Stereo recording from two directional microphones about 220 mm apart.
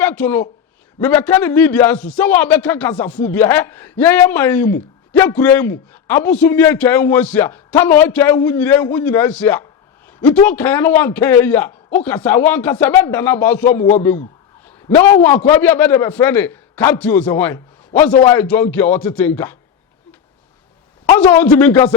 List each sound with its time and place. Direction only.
0.0 s a man's voice: 10° left (ahead or behind)
14.6 s a sound: 10° left (ahead or behind)
15.0 s a man's voice: 10° left (ahead or behind)
21.2 s a man's voice: 5° left (ahead or behind)